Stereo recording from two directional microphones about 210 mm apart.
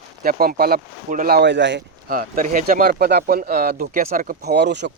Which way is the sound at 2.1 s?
40° right (ahead or behind).